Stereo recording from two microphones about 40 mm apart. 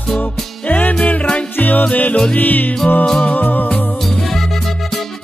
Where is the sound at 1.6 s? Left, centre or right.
Left.